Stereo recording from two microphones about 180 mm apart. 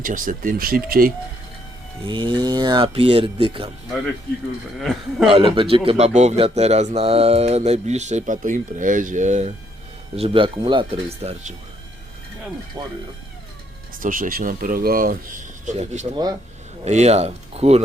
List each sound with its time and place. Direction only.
0.0 s speech: 50° right (ahead or behind)
2.0 s speech: 25° right (ahead or behind)
4.8 s speech: centre (ahead or behind)
5.3 s speech: 30° right (ahead or behind)
10.2 s speech: 30° right (ahead or behind)
12.8 s speech: 20° right (ahead or behind)
14.0 s speech: 50° right (ahead or behind)